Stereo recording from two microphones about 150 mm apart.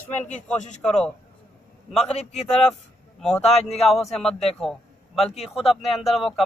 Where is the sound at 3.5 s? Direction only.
45° left (ahead or behind).